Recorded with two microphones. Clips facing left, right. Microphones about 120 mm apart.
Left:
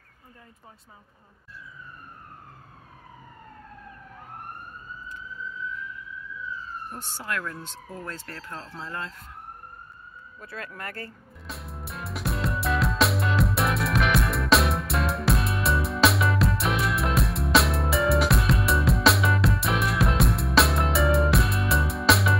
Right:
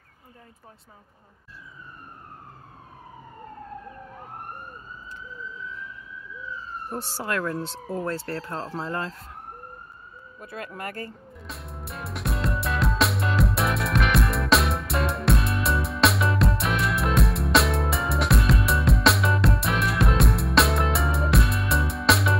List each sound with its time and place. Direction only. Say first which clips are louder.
6.9 s speech: right 6 dB; 35° right (ahead or behind)
10.4 s speech: right 3 dB; 20° right (ahead or behind)
11.4 s music: even; centre (ahead or behind)